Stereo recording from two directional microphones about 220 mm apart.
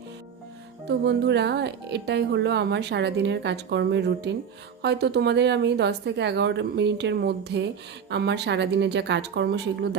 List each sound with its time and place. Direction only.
0.9 s speech: 50° right (ahead or behind)